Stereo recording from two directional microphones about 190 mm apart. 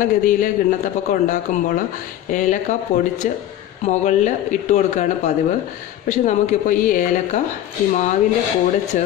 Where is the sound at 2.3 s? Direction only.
40° left (ahead or behind).